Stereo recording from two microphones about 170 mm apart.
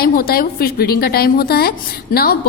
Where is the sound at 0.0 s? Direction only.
60° left (ahead or behind).